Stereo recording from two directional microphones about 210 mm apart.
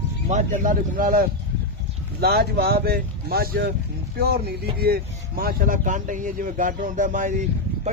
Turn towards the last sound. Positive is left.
turn(degrees=-35)  # may be behind; listen again after turning